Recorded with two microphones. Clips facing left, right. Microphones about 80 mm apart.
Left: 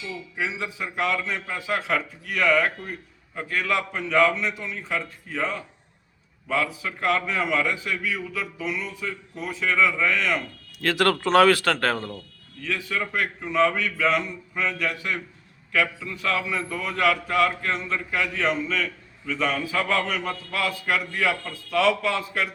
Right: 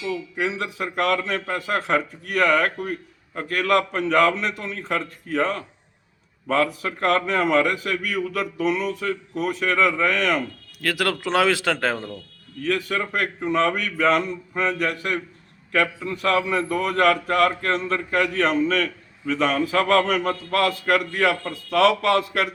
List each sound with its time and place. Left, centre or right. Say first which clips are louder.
0.3 s a man's voice: even; right
10.8 s speech: left 2 dB; centre
12.6 s a man's voice: right 4 dB; right